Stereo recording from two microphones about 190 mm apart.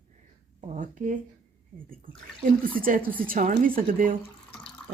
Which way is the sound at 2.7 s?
45° right (ahead or behind).